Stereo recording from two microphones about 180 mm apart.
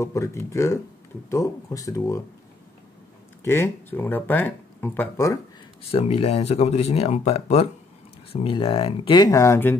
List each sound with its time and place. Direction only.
0.0 s speech: 15° left (ahead or behind)
3.4 s speech: 15° left (ahead or behind)
5.9 s speech: 35° left (ahead or behind); by 9.8 s 15° left (ahead or behind)